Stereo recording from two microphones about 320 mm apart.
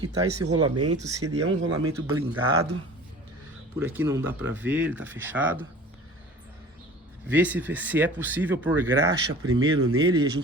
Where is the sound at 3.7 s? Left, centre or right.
Centre.